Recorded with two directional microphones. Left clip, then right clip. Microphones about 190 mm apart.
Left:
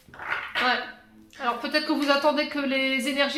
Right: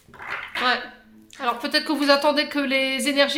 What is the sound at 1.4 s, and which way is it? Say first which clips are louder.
A woman's voice: right 3 dB; 30° right (ahead or behind).